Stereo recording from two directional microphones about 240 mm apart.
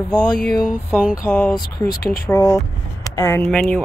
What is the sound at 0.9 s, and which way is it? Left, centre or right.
Music, centre.